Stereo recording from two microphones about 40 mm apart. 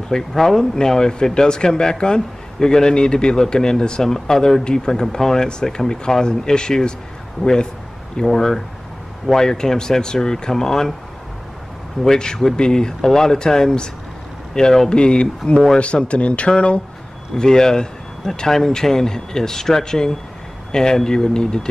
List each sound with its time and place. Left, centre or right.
0.3 s speech: centre
8.3 s speech: centre
12.2 s a man's voice: centre
17.4 s speech: centre